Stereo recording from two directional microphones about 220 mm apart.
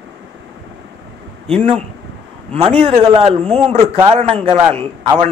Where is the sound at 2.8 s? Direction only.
25° right (ahead or behind).